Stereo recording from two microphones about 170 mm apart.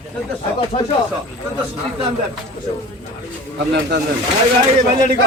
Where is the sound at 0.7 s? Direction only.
35° left (ahead or behind).